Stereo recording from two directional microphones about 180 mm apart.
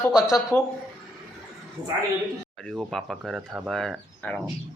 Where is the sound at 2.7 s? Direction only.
Centre (ahead or behind).